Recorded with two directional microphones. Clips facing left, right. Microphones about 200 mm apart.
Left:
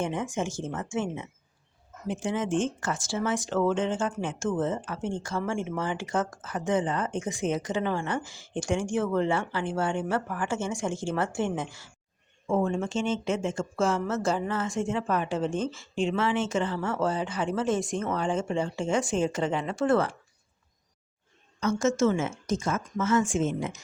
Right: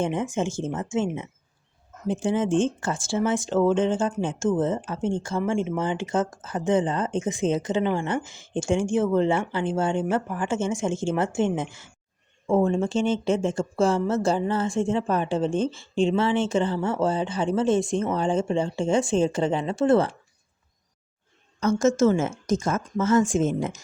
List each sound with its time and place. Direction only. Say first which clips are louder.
0.0 s a woman's voice: right 4 dB; 25° right (ahead or behind)
21.6 s a woman's voice: right 4 dB; 40° right (ahead or behind)